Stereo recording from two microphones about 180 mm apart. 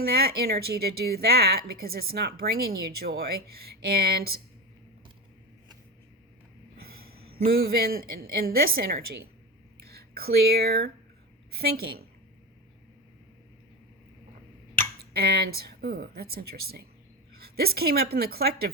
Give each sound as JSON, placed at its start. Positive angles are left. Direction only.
{"t": 0.0, "sound": "a woman's voice", "side_deg": -60}
{"t": 6.7, "sound": "a sound", "side_deg": -55}
{"t": 7.4, "sound": "a woman's voice", "side_deg": -60}
{"t": 14.8, "sound": "a woman's voice", "side_deg": -60}